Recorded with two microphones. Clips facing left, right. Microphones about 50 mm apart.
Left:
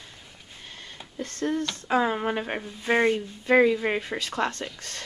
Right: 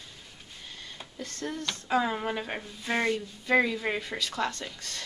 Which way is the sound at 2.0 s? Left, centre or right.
Left.